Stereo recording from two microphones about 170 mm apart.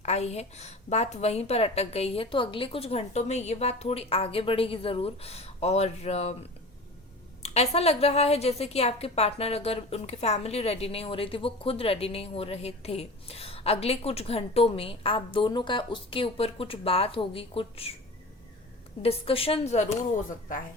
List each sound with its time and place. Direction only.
0.0 s a woman's voice: 40° left (ahead or behind)
7.4 s a woman's voice: 40° left (ahead or behind)
19.0 s a woman's voice: 35° left (ahead or behind)